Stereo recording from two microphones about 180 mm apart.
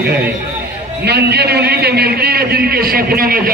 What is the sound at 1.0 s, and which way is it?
A man's voice, 65° right (ahead or behind).